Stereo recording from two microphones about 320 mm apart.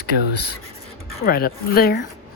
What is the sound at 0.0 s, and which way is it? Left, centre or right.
Speech, left.